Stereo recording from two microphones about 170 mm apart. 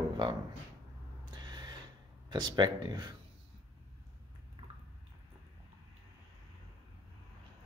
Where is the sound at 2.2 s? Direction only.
25° right (ahead or behind).